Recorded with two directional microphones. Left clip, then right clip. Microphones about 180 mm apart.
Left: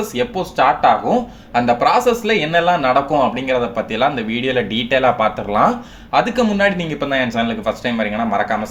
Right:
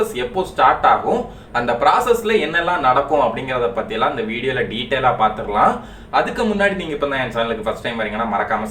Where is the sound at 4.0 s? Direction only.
40° left (ahead or behind).